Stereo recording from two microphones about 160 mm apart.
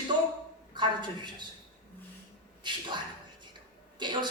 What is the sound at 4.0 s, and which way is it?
Speech, 30° right (ahead or behind).